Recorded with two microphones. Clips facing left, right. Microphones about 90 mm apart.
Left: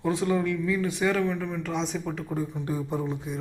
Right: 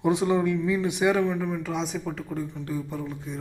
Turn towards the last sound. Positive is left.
turn(degrees=20)  # may be behind; listen again after turning